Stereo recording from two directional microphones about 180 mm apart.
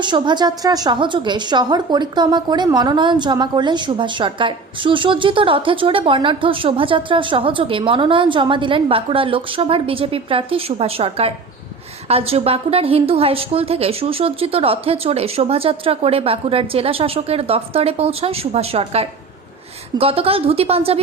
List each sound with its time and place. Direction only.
0.0 s a woman's voice: 25° right (ahead or behind)